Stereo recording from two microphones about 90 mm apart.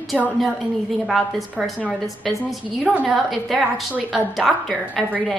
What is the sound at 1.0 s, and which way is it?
Speech, centre (ahead or behind).